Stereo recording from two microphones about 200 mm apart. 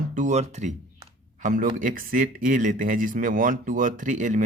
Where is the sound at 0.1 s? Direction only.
35° right (ahead or behind).